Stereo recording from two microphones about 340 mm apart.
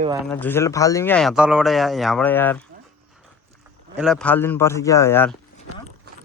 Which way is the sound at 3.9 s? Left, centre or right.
Centre.